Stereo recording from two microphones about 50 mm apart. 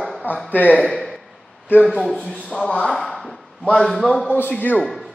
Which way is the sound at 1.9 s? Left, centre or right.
Centre.